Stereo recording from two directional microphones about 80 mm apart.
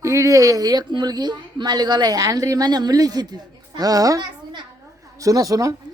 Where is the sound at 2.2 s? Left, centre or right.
Right.